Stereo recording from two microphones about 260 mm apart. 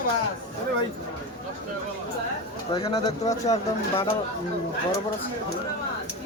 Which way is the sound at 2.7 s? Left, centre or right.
Centre.